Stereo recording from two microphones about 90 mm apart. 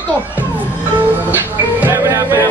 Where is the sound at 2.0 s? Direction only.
35° right (ahead or behind).